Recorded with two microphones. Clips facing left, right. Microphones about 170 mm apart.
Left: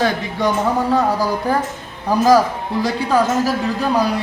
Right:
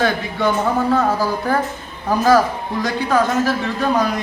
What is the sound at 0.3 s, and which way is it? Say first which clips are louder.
Speech: even; 15° left (ahead or behind).